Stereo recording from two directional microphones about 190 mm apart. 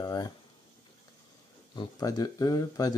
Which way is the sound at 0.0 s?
20° left (ahead or behind).